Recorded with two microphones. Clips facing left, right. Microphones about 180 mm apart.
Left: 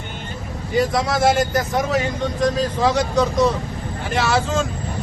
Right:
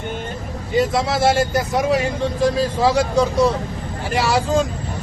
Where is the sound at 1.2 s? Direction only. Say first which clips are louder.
Even; 5° right (ahead or behind).